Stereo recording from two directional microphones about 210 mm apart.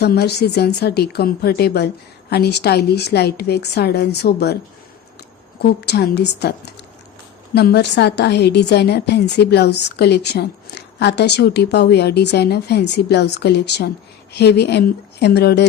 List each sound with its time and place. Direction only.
0.0 s a woman's voice: 50° left (ahead or behind)
5.6 s a woman's voice: 50° left (ahead or behind)